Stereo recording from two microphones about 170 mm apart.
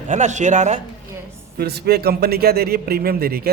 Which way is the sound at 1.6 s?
70° right (ahead or behind).